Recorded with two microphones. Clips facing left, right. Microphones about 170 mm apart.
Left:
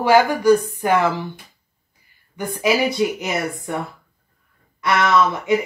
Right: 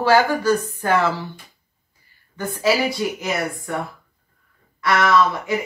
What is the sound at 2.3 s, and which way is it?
Speech, 15° left (ahead or behind).